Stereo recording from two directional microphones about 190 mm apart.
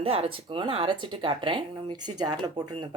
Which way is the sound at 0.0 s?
30° right (ahead or behind).